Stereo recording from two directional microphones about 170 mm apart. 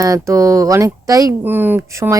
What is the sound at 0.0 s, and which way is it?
Speech, 20° right (ahead or behind).